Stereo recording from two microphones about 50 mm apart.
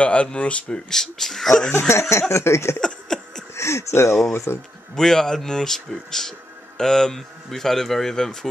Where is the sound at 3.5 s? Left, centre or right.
Left.